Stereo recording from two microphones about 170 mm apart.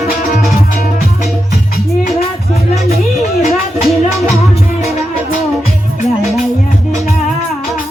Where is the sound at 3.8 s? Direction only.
Centre (ahead or behind).